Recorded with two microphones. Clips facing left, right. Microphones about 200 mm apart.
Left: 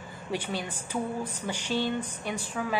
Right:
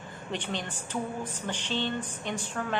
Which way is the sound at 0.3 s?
10° left (ahead or behind).